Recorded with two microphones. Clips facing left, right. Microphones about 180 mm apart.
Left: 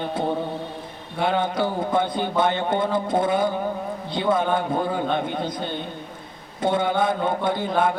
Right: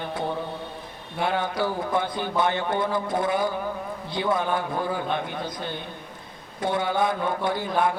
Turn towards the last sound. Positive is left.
turn(degrees=25)  # may be behind; listen again after turning